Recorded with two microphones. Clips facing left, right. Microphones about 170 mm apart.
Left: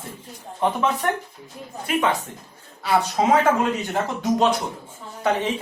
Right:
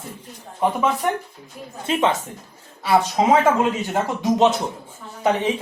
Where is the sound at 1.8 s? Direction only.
25° right (ahead or behind).